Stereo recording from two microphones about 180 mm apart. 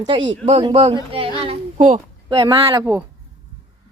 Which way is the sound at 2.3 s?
25° right (ahead or behind).